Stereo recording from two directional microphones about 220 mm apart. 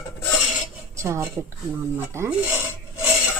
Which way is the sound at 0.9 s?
10° right (ahead or behind).